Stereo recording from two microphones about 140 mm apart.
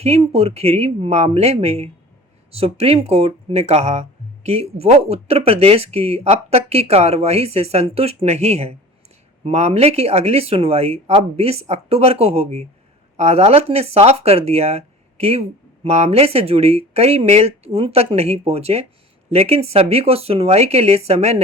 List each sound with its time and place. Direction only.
0.0 s speech: 45° right (ahead or behind)